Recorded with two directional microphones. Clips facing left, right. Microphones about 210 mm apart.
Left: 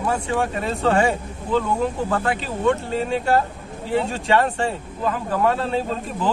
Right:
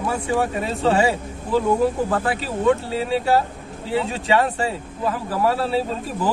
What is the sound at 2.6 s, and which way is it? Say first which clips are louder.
A man's voice: right 1 dB; 5° right (ahead or behind).